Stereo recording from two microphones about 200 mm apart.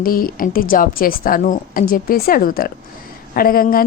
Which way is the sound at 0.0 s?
45° left (ahead or behind).